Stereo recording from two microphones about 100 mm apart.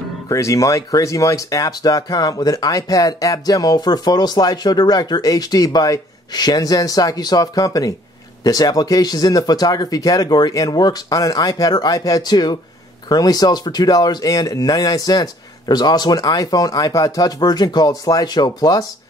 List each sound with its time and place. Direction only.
0.3 s speech: 35° left (ahead or behind)